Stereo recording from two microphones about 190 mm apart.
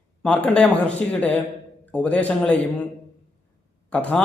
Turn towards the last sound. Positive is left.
turn(degrees=5)  # may be behind; listen again after turning